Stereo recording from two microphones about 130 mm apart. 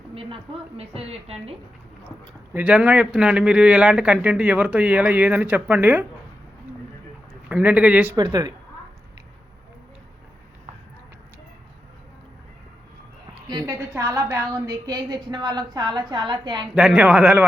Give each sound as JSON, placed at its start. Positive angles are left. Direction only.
{"t": 0.1, "sound": "a woman's voice", "side_deg": -45}
{"t": 2.5, "sound": "speech", "side_deg": -10}
{"t": 7.4, "sound": "speech", "side_deg": -10}
{"t": 8.1, "sound": "speech", "side_deg": -30}
{"t": 13.7, "sound": "a woman's voice", "side_deg": -20}
{"t": 16.7, "sound": "speech", "side_deg": -5}